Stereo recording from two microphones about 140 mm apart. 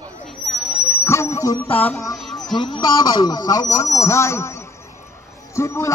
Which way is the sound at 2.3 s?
30° left (ahead or behind).